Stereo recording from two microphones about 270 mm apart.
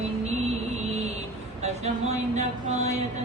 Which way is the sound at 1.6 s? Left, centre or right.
Right.